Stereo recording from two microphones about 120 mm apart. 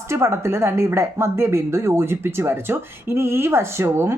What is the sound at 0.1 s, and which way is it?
Speech, 20° right (ahead or behind).